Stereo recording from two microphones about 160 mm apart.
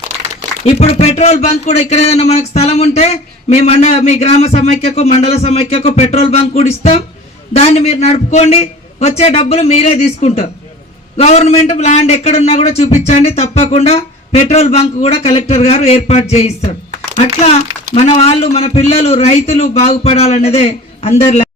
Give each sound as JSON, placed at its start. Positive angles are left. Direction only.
{"t": 0.6, "sound": "a man's voice", "side_deg": 40}